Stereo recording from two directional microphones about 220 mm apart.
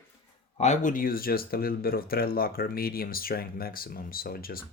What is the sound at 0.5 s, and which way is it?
Speech, 30° left (ahead or behind).